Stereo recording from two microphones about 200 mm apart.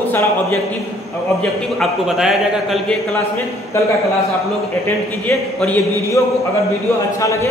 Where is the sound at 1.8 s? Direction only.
Centre (ahead or behind).